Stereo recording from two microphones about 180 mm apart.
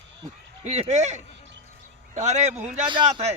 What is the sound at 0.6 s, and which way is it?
A man's voice, 40° right (ahead or behind).